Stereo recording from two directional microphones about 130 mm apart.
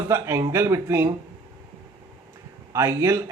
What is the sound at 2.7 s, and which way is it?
Speech, 20° right (ahead or behind).